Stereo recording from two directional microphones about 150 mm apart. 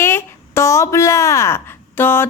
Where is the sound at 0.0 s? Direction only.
15° left (ahead or behind).